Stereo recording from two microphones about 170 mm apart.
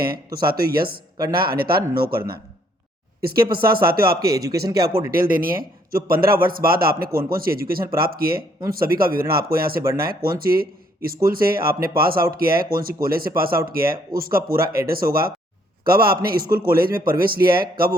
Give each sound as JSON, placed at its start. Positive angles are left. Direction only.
{"t": 0.4, "sound": "speech", "side_deg": -60}
{"t": 4.4, "sound": "speech", "side_deg": -20}
{"t": 5.1, "sound": "speech", "side_deg": -55}